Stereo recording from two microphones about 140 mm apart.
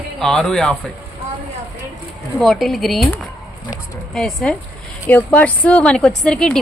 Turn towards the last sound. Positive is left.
turn(degrees=5)  # may be behind; listen again after turning